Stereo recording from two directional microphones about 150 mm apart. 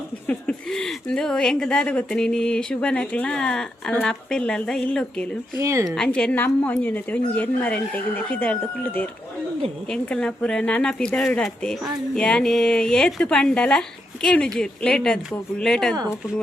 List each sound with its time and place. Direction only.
0.3 s speech: 5° left (ahead or behind)
5.5 s speech: 20° right (ahead or behind)
5.9 s a woman's voice: 5° left (ahead or behind)